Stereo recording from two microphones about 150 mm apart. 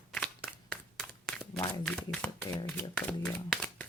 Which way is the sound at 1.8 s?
10° left (ahead or behind).